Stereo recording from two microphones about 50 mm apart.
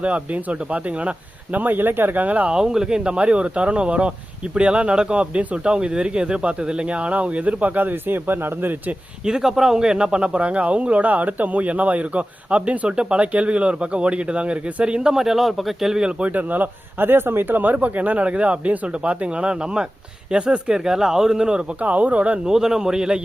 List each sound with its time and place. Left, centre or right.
0.0 s a man's voice: right
1.5 s speech: right
2.5 s a man's voice: centre; by 9.0 s right
9.2 s a man's voice: centre
16.2 s speech: right; by 21.6 s centre
21.8 s a man's voice: right
22.4 s speech: centre